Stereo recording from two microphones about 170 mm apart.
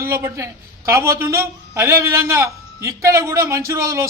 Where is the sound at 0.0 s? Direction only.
15° right (ahead or behind).